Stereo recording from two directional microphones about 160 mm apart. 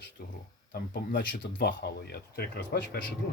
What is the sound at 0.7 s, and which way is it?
Speech, 90° left.